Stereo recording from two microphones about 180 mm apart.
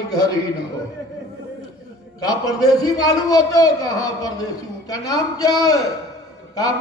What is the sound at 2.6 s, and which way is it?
A man's voice, 20° left (ahead or behind).